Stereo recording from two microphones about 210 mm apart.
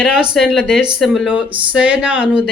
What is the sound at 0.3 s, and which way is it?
Speech, centre (ahead or behind).